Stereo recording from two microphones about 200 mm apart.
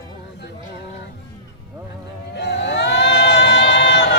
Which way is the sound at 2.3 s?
55° left (ahead or behind).